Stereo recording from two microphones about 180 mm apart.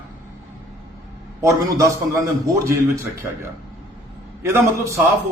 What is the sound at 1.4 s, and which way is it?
A man's voice, 20° right (ahead or behind).